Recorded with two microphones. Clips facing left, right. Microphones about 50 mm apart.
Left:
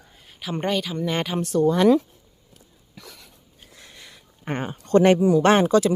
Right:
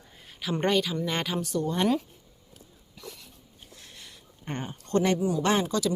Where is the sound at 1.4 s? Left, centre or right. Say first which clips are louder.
Left 8 dB; left.